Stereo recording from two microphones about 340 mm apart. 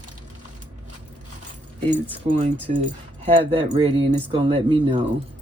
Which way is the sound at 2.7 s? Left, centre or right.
Right.